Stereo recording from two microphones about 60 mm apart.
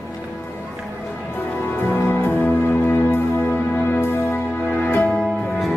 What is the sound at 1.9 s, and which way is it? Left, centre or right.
Music, left.